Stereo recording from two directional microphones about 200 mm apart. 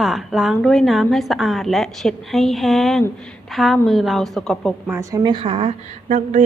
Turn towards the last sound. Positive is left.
turn(degrees=-35)  # may be behind; listen again after turning